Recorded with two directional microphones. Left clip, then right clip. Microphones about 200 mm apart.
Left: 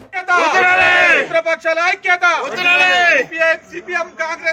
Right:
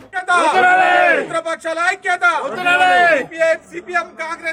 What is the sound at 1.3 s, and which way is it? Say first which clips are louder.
Speech: left 5 dB; 35° right (ahead or behind).